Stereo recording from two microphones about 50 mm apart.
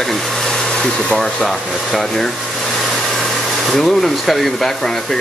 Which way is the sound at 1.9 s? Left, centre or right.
Centre.